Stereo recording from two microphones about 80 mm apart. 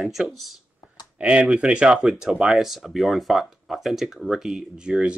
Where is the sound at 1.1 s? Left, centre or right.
Centre.